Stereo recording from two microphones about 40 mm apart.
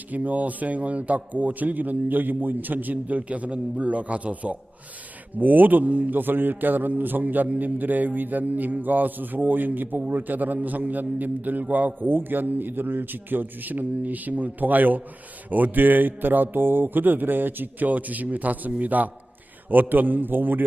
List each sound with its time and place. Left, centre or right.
0.1 s a man's voice: right
5.4 s a man's voice: right